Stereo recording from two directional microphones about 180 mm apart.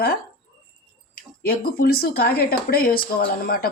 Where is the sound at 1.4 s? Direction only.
55° left (ahead or behind).